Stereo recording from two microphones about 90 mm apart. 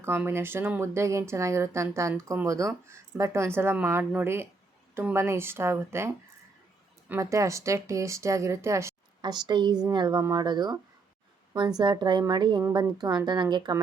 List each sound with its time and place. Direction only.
0.3 s a woman's voice: 25° right (ahead or behind)
7.2 s a woman's voice: 35° right (ahead or behind)
9.2 s a woman's voice: 55° right (ahead or behind)
11.8 s a woman's voice: 55° right (ahead or behind)